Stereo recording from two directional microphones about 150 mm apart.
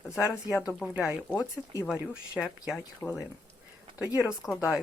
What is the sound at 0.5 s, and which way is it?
Speech, 20° left (ahead or behind).